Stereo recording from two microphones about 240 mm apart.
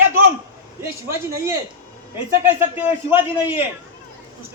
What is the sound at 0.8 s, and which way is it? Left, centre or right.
Speech, centre.